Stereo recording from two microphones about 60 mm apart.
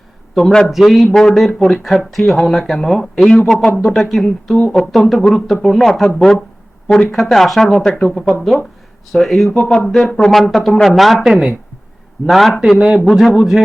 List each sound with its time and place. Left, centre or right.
0.3 s speech: centre
12.7 s speech: centre
13.1 s speech: centre